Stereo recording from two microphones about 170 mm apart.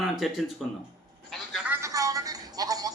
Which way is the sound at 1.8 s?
20° right (ahead or behind).